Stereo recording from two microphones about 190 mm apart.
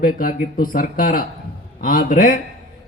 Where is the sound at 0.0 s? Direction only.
50° left (ahead or behind).